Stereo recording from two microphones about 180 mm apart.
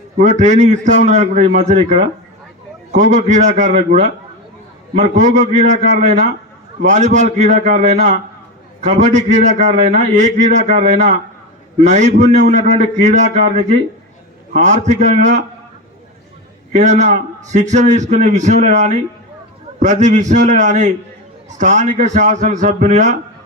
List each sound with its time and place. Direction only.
0.2 s a man's voice: 40° right (ahead or behind)
16.7 s a man's voice: 40° right (ahead or behind)